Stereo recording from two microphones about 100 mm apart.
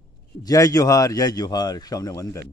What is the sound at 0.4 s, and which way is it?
A man's voice, 35° left (ahead or behind).